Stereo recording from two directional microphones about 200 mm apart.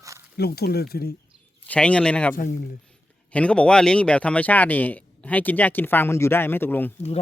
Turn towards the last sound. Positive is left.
turn(degrees=10)  # may be behind; listen again after turning